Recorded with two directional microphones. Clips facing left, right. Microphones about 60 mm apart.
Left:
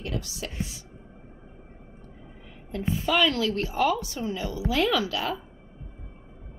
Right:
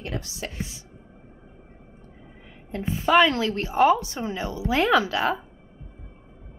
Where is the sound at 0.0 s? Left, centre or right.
Right.